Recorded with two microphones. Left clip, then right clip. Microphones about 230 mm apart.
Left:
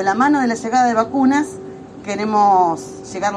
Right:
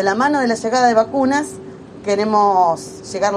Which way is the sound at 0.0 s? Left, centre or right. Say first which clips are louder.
Even; right.